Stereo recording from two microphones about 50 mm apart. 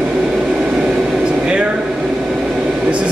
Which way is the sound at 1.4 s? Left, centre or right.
Right.